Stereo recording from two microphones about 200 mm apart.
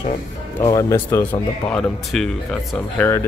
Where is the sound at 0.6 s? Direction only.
15° left (ahead or behind).